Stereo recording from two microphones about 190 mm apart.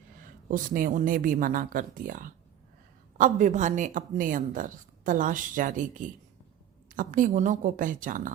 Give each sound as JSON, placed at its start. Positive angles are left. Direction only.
{"t": 0.2, "sound": "speech", "side_deg": -45}